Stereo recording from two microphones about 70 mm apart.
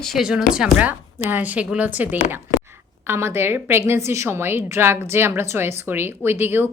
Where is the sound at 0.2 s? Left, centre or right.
Centre.